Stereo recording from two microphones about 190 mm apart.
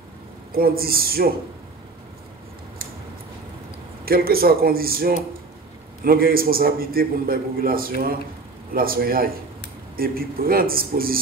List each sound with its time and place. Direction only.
0.5 s a man's voice: 50° right (ahead or behind)
4.0 s a man's voice: 50° right (ahead or behind)